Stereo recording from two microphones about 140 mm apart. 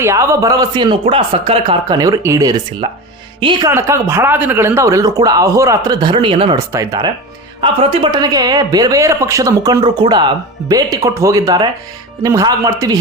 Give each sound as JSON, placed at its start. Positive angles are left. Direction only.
{"t": 0.0, "sound": "speech", "side_deg": -20}
{"t": 2.8, "sound": "speech", "side_deg": -40}
{"t": 3.7, "sound": "speech", "side_deg": -20}
{"t": 6.7, "sound": "speech", "side_deg": -25}
{"t": 7.6, "sound": "speech", "side_deg": -40}